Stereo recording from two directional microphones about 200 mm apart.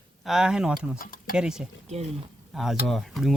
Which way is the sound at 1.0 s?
45° left (ahead or behind).